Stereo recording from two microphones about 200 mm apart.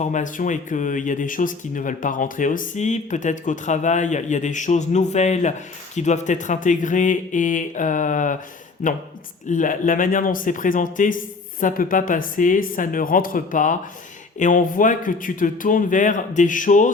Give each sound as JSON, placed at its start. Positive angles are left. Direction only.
{"t": 0.0, "sound": "speech", "side_deg": 40}